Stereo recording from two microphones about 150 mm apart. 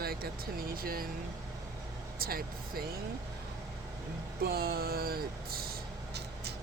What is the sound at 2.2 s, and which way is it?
Speech, 80° right.